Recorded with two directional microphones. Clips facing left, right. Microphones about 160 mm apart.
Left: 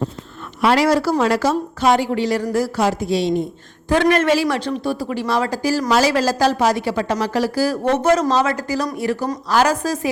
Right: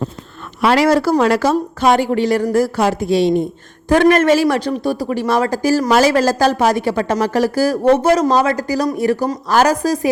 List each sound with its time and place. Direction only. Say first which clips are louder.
0.6 s speech: right 3 dB; 70° right (ahead or behind)
3.8 s speech: right 4 dB; 45° right (ahead or behind)
8.0 s a woman's voice: right 2 dB; 30° right (ahead or behind)
9.0 s a woman's voice: right 5 dB; 45° right (ahead or behind)